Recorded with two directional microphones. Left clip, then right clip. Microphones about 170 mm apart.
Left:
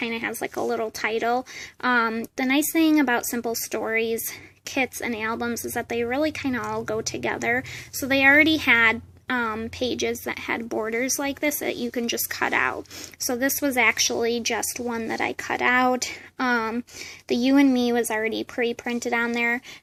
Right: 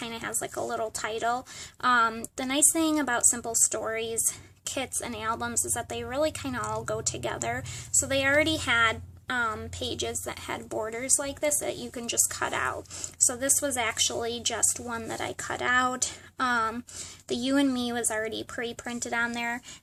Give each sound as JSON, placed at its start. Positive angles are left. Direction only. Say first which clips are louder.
{"t": 0.0, "sound": "speech", "louder": "left 6 dB", "side_deg": 15}